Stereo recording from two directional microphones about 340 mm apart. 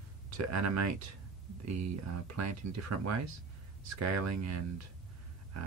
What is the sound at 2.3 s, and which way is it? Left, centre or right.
Speech, right.